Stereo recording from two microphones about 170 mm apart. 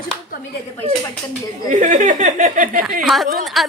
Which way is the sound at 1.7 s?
45° right (ahead or behind).